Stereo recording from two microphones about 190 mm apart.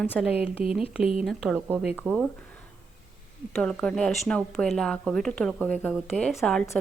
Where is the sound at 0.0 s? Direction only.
5° right (ahead or behind).